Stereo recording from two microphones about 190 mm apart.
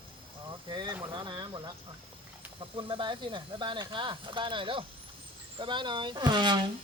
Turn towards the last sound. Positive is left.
turn(degrees=-25)  # may be behind; listen again after turning